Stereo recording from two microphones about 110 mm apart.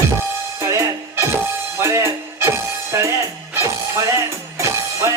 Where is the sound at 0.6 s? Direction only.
25° right (ahead or behind).